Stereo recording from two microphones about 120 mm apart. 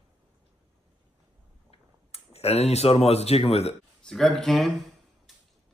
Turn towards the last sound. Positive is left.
turn(degrees=0)  # may be behind; listen again after turning